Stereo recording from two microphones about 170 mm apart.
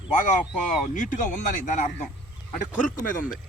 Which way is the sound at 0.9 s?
50° left (ahead or behind).